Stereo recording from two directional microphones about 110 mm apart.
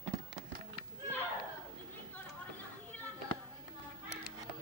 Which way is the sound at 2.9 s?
15° left (ahead or behind).